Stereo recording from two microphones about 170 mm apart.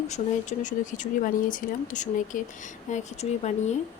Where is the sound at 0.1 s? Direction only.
45° left (ahead or behind).